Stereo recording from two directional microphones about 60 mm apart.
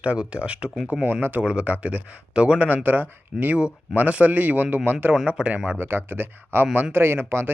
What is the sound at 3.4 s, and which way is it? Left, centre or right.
Speech, right.